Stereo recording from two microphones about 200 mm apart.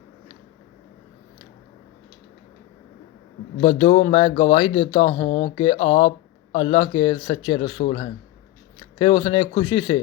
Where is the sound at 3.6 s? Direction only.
25° left (ahead or behind).